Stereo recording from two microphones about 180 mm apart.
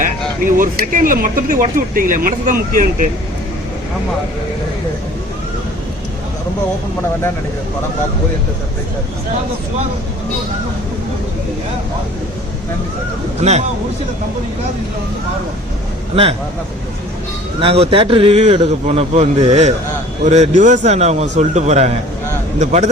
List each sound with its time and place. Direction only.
0.0 s speech: 50° right (ahead or behind)
13.4 s speech: 40° right (ahead or behind)
17.6 s speech: 30° right (ahead or behind)